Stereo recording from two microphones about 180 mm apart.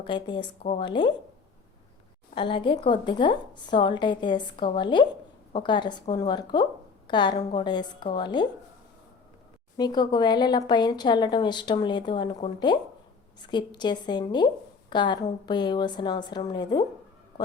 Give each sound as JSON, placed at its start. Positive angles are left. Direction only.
{"t": 0.0, "sound": "a woman's voice", "side_deg": 25}
{"t": 2.3, "sound": "a woman's voice", "side_deg": 30}
{"t": 9.7, "sound": "a woman's voice", "side_deg": 25}